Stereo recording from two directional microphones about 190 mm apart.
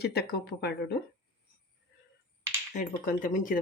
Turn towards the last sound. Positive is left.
turn(degrees=45)  # may be behind; listen again after turning